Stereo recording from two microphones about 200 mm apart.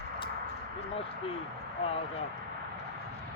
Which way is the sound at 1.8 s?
30° left (ahead or behind).